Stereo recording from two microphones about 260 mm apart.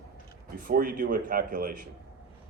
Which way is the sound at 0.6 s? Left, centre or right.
Right.